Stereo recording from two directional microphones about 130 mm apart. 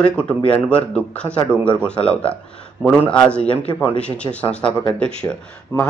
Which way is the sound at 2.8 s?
10° left (ahead or behind).